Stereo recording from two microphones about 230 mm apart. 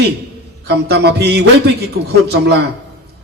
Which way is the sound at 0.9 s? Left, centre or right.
Right.